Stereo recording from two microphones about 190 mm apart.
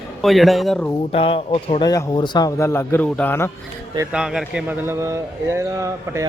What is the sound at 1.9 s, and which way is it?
A man's voice, 20° left (ahead or behind).